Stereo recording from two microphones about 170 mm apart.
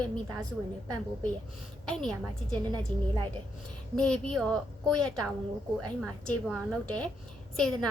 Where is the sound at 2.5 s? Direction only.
25° right (ahead or behind).